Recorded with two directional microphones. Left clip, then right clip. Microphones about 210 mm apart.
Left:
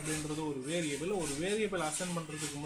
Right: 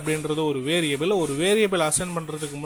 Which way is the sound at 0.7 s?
35° right (ahead or behind).